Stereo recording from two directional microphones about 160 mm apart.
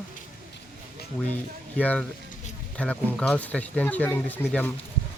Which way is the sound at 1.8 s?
10° left (ahead or behind).